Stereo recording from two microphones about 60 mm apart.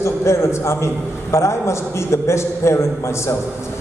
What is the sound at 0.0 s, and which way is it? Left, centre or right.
Speech, left.